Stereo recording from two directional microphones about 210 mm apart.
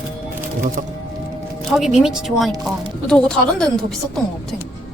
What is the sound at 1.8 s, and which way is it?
Speech, centre (ahead or behind).